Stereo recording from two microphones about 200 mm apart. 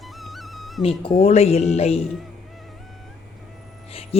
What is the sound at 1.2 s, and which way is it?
Speech, 30° left (ahead or behind).